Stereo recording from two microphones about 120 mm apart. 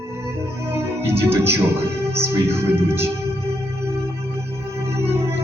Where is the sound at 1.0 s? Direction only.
20° right (ahead or behind).